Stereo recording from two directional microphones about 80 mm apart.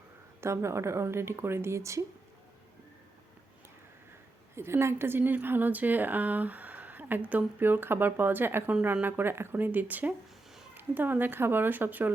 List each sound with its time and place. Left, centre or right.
0.4 s a woman's voice: right
4.5 s a woman's voice: right